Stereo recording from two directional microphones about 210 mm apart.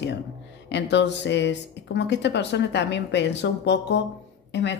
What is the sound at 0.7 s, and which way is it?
A woman's voice, 55° left (ahead or behind).